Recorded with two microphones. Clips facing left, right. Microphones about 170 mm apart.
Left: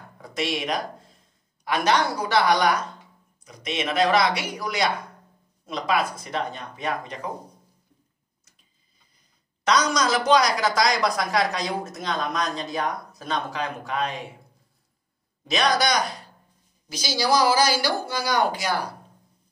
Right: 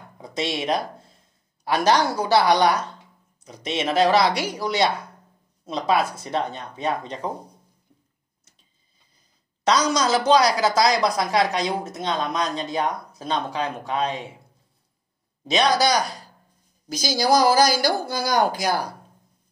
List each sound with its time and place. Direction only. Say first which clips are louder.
0.2 s a woman's voice: right 1 dB; 25° right (ahead or behind)
9.7 s speech: right 2 dB; 30° right (ahead or behind)
15.8 s a woman's voice: right 3 dB; 35° right (ahead or behind)
16.9 s speech: right 3 dB; 45° right (ahead or behind)